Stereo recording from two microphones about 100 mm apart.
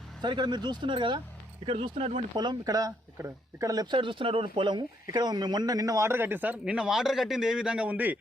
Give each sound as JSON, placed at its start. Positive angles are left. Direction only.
{"t": 0.2, "sound": "speech", "side_deg": -50}
{"t": 1.6, "sound": "speech", "side_deg": -70}
{"t": 2.3, "sound": "speech", "side_deg": -45}
{"t": 3.9, "sound": "a man's voice", "side_deg": -55}